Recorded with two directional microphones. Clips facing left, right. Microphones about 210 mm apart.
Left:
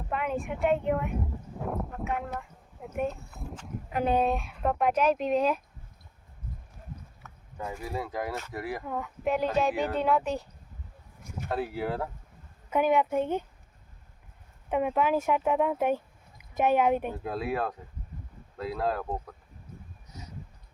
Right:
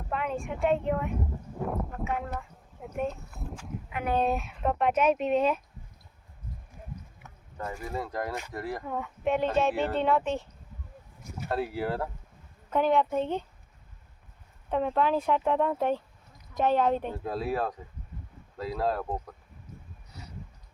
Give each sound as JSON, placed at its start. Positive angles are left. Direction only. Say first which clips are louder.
{"t": 0.1, "sound": "speech", "louder": "left 1 dB", "side_deg": 0}
{"t": 7.7, "sound": "speech", "louder": "even", "side_deg": 5}
{"t": 11.4, "sound": "speech", "louder": "right 1 dB", "side_deg": 0}
{"t": 14.7, "sound": "speech", "louder": "even", "side_deg": 10}
{"t": 17.2, "sound": "speech", "louder": "right 1 dB", "side_deg": 0}
{"t": 20.1, "sound": "a sound", "louder": "left 1 dB", "side_deg": 20}